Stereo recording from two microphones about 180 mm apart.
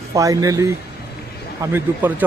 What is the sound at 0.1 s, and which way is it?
Speech, 20° right (ahead or behind).